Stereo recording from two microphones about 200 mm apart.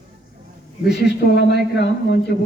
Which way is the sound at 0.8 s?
55° left (ahead or behind).